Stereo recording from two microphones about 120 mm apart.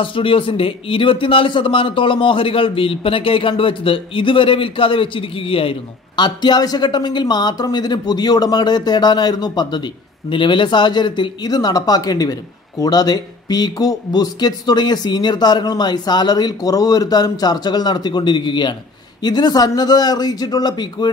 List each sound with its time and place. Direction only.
0.0 s a man's voice: 45° left (ahead or behind)